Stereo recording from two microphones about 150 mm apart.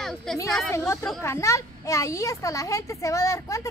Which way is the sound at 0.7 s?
20° left (ahead or behind).